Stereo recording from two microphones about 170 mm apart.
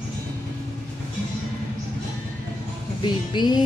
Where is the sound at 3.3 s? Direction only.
25° left (ahead or behind).